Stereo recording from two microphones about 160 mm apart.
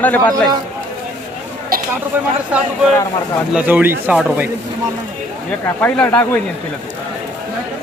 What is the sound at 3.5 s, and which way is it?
Speech, 10° right (ahead or behind).